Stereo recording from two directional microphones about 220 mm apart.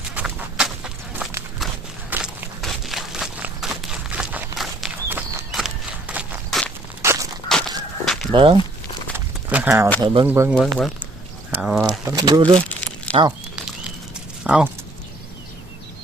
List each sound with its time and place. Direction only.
0.1 s horse: 5° right (ahead or behind)
1.2 s walk: centre (ahead or behind)
1.5 s a sound: 5° right (ahead or behind)
7.0 s walk: 10° right (ahead or behind)
7.4 s fowl: centre (ahead or behind)
8.3 s speech: 20° right (ahead or behind)
9.1 s a sound: 10° right (ahead or behind)
10.0 s speech: 25° right (ahead or behind)
10.2 s speech: 15° right (ahead or behind)
10.5 s speech: centre (ahead or behind)
12.0 s speech: 15° right (ahead or behind)
13.1 s a sound: 5° left (ahead or behind)
14.4 s speech: 5° right (ahead or behind)